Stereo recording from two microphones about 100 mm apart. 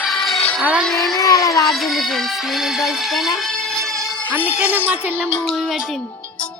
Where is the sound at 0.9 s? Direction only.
5° left (ahead or behind).